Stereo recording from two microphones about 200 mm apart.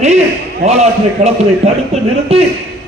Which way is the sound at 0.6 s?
35° right (ahead or behind).